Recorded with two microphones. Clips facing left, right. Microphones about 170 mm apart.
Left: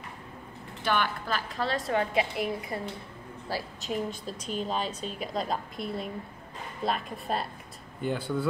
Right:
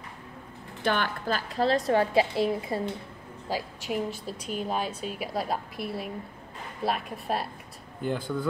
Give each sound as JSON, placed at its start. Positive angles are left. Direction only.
{"t": 0.8, "sound": "a woman's voice", "side_deg": -45}
{"t": 3.4, "sound": "a woman's voice", "side_deg": -10}